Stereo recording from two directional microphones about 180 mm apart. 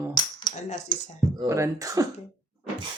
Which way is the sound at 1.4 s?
15° right (ahead or behind).